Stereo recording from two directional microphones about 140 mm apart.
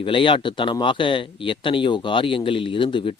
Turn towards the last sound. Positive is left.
turn(degrees=35)  # may be behind; listen again after turning